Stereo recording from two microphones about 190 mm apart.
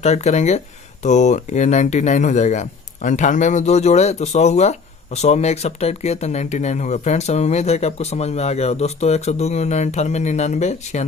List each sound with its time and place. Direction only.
0.0 s speech: 35° left (ahead or behind)